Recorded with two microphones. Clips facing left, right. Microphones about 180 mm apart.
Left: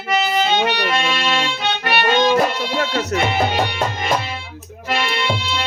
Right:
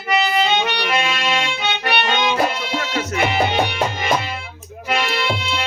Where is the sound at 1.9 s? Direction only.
45° left (ahead or behind).